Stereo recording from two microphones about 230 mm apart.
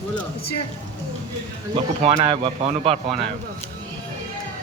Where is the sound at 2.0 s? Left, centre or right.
Right.